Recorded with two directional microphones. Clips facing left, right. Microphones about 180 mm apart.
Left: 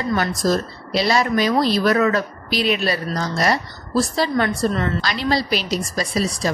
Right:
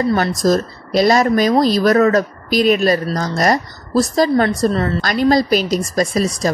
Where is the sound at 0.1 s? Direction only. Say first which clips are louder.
Right 4 dB; 40° right (ahead or behind).